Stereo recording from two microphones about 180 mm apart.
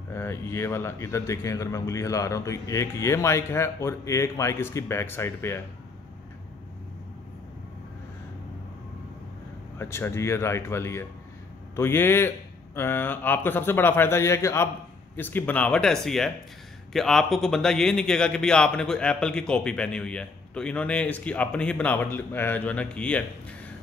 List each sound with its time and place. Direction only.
0.1 s speech: 15° left (ahead or behind)
9.8 s a man's voice: 15° left (ahead or behind)